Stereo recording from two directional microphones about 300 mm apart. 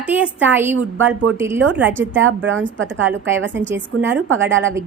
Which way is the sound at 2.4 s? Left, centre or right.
Right.